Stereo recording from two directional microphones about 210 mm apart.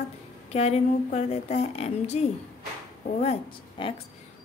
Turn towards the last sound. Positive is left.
turn(degrees=25)  # may be behind; listen again after turning